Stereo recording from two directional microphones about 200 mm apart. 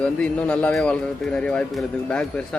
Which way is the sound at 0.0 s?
5° left (ahead or behind).